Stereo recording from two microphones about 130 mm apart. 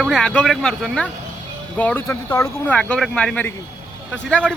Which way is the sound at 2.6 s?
10° left (ahead or behind).